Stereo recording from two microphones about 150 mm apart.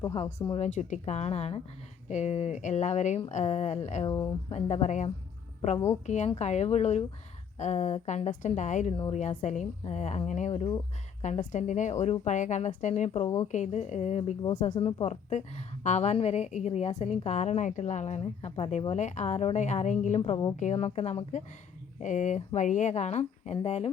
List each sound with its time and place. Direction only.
0.1 s a woman's voice: 45° left (ahead or behind)
4.1 s speech: 25° left (ahead or behind)
4.5 s a woman's voice: 50° left (ahead or behind)
6.1 s a woman's voice: 50° left (ahead or behind)
14.8 s a woman's voice: 35° left (ahead or behind)
15.0 s a woman's voice: 50° left (ahead or behind)